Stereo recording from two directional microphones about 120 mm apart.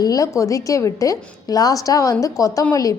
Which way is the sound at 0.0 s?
30° left (ahead or behind).